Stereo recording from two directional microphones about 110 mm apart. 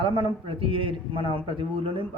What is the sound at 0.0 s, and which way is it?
A man's voice, 60° right (ahead or behind).